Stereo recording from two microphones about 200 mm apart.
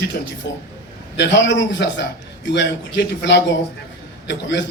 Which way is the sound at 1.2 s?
65° left (ahead or behind).